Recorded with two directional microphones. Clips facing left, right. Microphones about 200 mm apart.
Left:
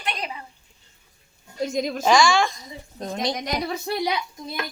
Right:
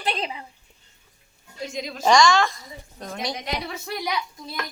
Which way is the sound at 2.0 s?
5° left (ahead or behind).